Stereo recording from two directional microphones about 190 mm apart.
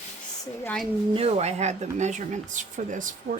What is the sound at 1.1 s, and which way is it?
Speech, 30° right (ahead or behind).